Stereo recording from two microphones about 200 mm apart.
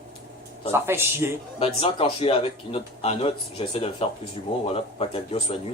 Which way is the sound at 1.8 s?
25° left (ahead or behind).